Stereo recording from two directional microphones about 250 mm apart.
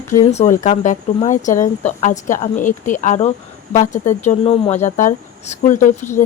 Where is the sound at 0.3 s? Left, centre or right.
Left.